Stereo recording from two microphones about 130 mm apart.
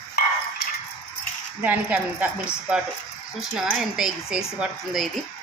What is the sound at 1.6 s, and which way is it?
A woman's voice, 15° right (ahead or behind).